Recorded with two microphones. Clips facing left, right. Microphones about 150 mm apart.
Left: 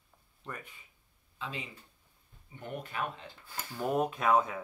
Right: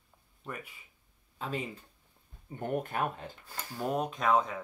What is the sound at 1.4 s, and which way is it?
Speech, 45° right (ahead or behind).